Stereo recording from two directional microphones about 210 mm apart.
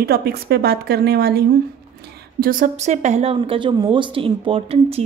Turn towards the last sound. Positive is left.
turn(degrees=-30)  # may be behind; listen again after turning